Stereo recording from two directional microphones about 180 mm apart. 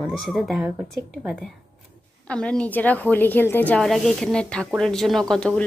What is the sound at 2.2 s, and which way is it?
Speech, 5° left (ahead or behind).